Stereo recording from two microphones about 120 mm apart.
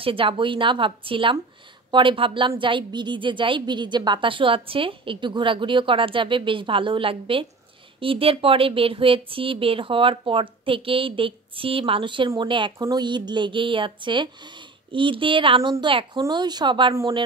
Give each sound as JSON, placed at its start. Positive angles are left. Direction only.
{"t": 0.0, "sound": "a woman's voice", "side_deg": -50}
{"t": 12.7, "sound": "a woman's voice", "side_deg": -30}